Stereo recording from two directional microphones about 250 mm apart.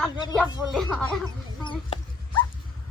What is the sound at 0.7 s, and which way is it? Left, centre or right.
Speech, centre.